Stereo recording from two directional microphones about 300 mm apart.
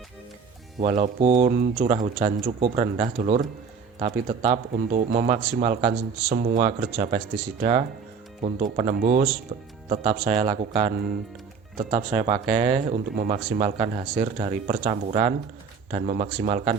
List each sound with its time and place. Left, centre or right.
0.8 s speech: right